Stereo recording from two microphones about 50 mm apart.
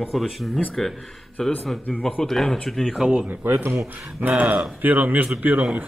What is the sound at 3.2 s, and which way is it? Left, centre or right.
Speech, right.